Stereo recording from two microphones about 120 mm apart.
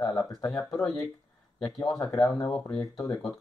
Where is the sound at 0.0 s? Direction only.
5° left (ahead or behind).